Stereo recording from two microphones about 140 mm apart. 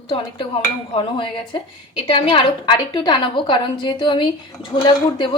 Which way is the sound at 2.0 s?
40° left (ahead or behind).